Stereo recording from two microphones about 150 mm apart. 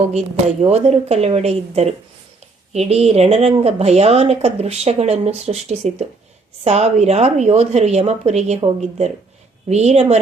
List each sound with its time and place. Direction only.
0.1 s speech: 45° right (ahead or behind)